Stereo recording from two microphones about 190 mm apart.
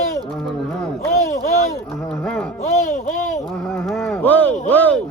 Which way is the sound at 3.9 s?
Centre (ahead or behind).